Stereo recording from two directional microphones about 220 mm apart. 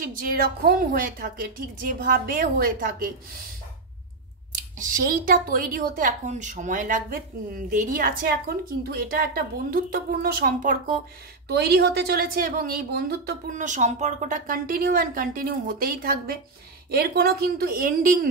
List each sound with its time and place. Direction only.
0.0 s a woman's voice: 40° right (ahead or behind)
4.5 s a woman's voice: 35° right (ahead or behind)